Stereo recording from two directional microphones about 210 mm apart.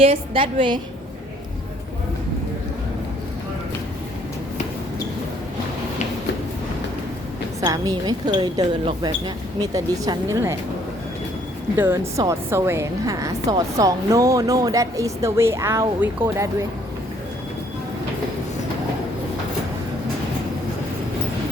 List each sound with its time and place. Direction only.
0.0 s speech: 25° right (ahead or behind)
7.6 s speech: 20° right (ahead or behind)
11.8 s a woman's voice: 15° right (ahead or behind)